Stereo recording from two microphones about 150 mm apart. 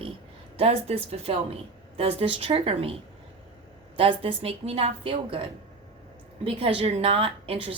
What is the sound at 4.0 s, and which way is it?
Speech, 40° right (ahead or behind).